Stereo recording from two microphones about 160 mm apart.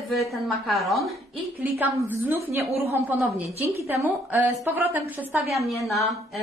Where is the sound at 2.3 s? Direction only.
15° right (ahead or behind).